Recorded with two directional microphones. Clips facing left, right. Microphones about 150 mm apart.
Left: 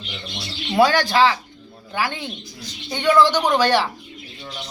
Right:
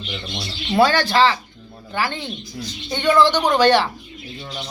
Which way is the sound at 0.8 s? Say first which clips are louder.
Even; 15° left (ahead or behind).